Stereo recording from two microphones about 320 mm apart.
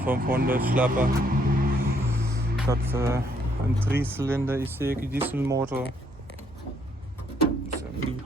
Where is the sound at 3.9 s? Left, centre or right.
Centre.